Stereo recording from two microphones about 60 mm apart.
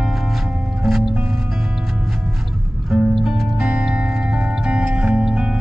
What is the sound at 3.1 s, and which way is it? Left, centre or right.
Music, centre.